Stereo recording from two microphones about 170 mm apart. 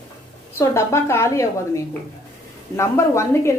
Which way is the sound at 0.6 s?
15° left (ahead or behind).